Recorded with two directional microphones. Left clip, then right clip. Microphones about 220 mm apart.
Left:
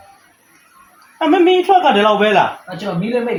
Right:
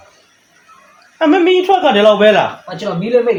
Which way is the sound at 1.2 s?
30° right (ahead or behind).